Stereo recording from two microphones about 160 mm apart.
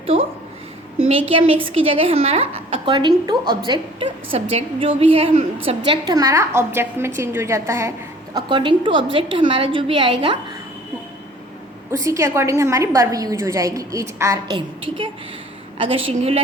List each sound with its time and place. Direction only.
0.0 s a woman's voice: 35° right (ahead or behind)
12.0 s a woman's voice: 20° right (ahead or behind)
14.5 s a woman's voice: 30° right (ahead or behind)